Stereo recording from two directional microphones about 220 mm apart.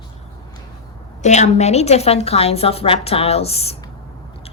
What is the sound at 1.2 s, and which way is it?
A woman's voice, 30° left (ahead or behind).